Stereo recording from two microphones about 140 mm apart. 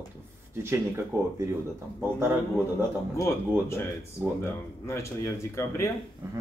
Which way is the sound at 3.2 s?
20° left (ahead or behind).